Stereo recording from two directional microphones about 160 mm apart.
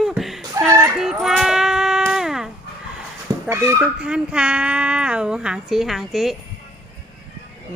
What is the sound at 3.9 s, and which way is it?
Speech, 5° right (ahead or behind).